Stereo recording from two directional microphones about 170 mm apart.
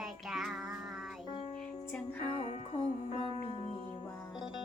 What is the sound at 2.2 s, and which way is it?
Music, 45° left (ahead or behind).